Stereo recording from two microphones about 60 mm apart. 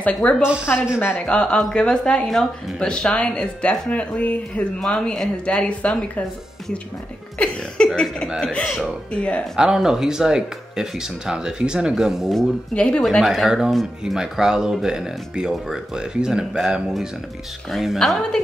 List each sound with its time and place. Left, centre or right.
0.0 s speech: centre
0.9 s a woman's voice: left
1.2 s speech: centre
7.4 s speech: centre
9.6 s speech: centre
12.4 s speech: centre
13.2 s a woman's voice: centre
17.9 s a woman's voice: centre